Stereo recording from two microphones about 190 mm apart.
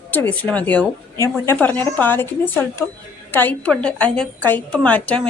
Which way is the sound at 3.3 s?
10° left (ahead or behind).